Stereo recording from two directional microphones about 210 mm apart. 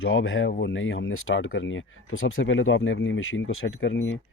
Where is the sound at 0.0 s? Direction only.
70° left (ahead or behind).